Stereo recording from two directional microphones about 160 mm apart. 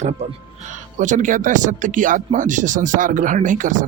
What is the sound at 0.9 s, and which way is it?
Speech, 50° right (ahead or behind).